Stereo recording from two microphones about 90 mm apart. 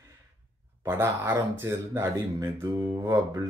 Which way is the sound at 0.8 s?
25° right (ahead or behind).